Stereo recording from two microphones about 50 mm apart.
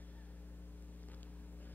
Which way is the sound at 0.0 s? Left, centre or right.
Left.